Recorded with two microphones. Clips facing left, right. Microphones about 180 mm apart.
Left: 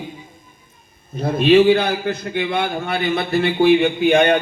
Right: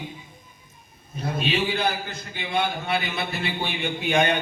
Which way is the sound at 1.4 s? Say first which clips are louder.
Left 13 dB; 55° left (ahead or behind).